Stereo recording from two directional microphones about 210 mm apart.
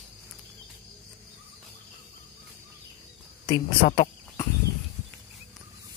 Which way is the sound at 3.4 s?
20° left (ahead or behind).